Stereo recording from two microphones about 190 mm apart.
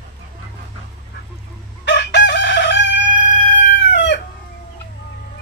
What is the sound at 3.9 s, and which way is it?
Chicken, 65° left (ahead or behind).